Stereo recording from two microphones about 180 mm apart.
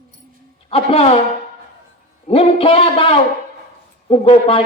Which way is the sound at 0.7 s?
30° left (ahead or behind).